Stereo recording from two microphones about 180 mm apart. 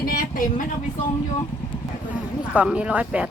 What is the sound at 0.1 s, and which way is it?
Vehicle, 50° left (ahead or behind).